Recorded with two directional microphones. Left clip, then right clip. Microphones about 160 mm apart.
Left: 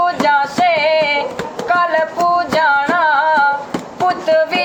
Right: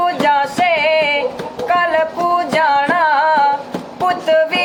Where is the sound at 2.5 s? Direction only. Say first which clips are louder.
Even; 5° right (ahead or behind).